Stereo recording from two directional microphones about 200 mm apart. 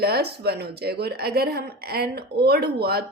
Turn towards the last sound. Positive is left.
turn(degrees=-50)  # may be behind; listen again after turning